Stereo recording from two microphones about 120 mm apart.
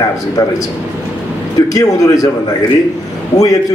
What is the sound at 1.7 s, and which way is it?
Speech, 30° left (ahead or behind).